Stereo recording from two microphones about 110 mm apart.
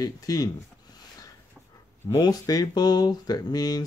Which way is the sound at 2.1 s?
35° left (ahead or behind).